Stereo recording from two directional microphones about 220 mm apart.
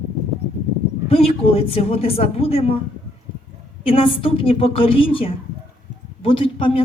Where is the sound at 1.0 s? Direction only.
25° left (ahead or behind).